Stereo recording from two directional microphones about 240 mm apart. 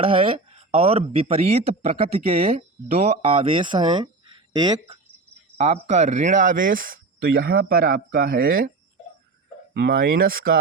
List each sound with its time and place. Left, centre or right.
0.0 s speech: right
5.5 s speech: right
9.7 s speech: right